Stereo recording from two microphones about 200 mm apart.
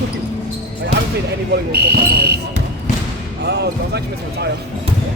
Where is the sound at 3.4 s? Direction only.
55° right (ahead or behind).